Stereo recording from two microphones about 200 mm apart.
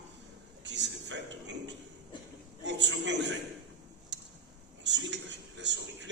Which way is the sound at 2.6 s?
65° right (ahead or behind).